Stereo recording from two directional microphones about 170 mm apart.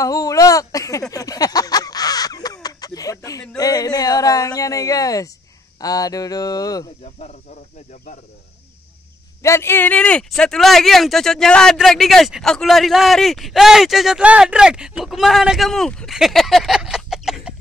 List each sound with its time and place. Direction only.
0.0 s speech: 20° left (ahead or behind)
1.1 s a sound: 20° left (ahead or behind)
5.8 s speech: 20° left (ahead or behind)
9.4 s speech: 15° left (ahead or behind); by 17.6 s 5° right (ahead or behind)